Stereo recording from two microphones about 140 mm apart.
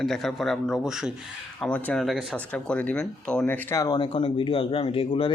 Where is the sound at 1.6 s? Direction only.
10° left (ahead or behind).